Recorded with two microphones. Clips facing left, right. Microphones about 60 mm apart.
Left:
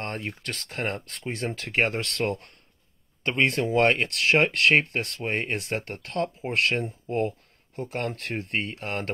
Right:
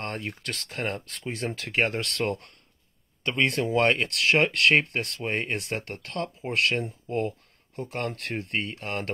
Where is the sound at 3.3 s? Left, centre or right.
Left.